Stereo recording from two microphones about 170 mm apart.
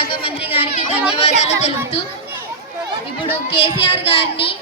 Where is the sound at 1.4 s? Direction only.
40° left (ahead or behind).